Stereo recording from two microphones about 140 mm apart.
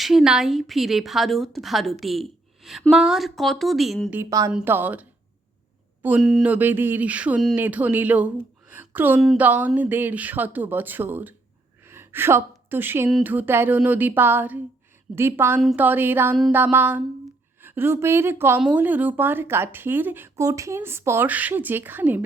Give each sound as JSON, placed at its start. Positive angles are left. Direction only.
{"t": 0.0, "sound": "a woman's voice", "side_deg": 0}
{"t": 4.1, "sound": "a woman's voice", "side_deg": -20}
{"t": 4.5, "sound": "speech", "side_deg": -15}
{"t": 6.2, "sound": "a woman's voice", "side_deg": 0}
{"t": 6.5, "sound": "speech", "side_deg": -15}
{"t": 8.7, "sound": "a sound", "side_deg": -15}
{"t": 9.4, "sound": "a woman's voice", "side_deg": -10}